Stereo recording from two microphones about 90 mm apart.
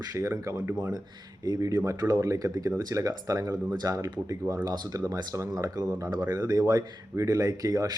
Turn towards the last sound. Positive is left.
turn(degrees=-40)  # may be behind; listen again after turning